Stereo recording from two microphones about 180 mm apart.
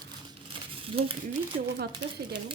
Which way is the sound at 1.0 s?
30° right (ahead or behind).